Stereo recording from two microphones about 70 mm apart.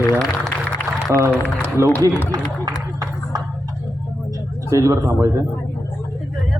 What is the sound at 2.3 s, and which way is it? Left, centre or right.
Run, right.